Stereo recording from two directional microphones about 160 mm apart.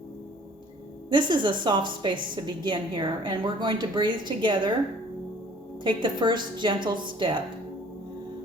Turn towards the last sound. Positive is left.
turn(degrees=-30)  # may be behind; listen again after turning